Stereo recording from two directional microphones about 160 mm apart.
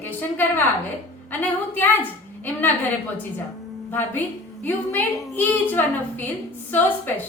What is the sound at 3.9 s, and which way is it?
A woman's voice, 10° left (ahead or behind).